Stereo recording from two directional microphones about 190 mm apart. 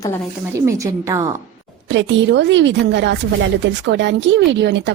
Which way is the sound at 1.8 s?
70° right (ahead or behind).